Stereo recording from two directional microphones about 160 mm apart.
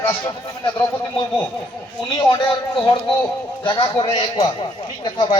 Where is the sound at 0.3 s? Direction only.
25° left (ahead or behind).